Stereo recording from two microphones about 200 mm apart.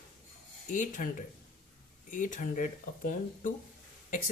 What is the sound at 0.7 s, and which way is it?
Speech, 40° left (ahead or behind).